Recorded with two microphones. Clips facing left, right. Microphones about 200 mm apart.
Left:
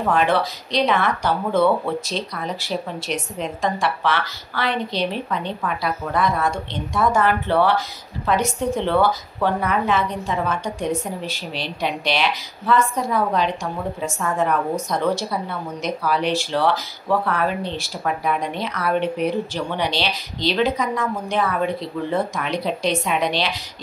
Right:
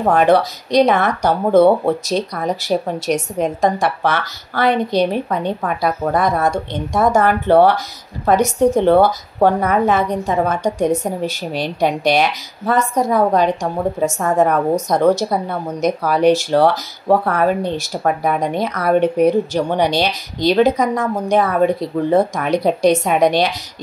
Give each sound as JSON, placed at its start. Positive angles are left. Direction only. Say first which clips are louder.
{"t": 0.0, "sound": "a woman's voice", "louder": "right 6 dB", "side_deg": -45}